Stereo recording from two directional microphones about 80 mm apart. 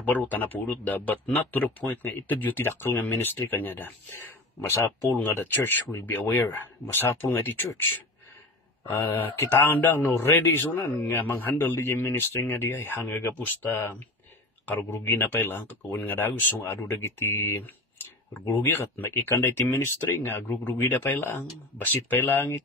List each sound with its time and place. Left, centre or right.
0.0 s a man's voice: left
4.6 s speech: left
5.2 s a man's voice: left
9.0 s a man's voice: left
18.6 s a man's voice: left